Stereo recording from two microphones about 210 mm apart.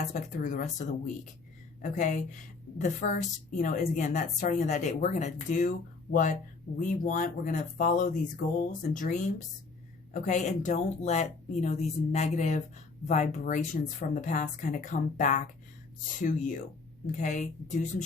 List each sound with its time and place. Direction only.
0.0 s a woman's voice: 40° left (ahead or behind)